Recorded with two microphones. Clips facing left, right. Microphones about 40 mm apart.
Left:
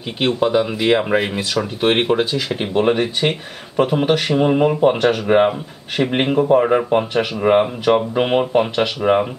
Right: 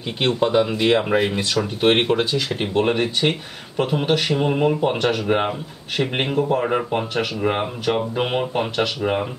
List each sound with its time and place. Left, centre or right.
0.2 s speech: centre
6.3 s speech: centre